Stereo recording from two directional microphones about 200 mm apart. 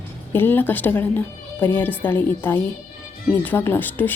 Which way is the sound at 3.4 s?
10° left (ahead or behind).